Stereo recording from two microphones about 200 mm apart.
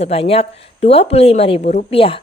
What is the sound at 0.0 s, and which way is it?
Speech, 30° left (ahead or behind).